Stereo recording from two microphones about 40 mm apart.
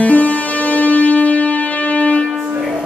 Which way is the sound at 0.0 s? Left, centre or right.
Left.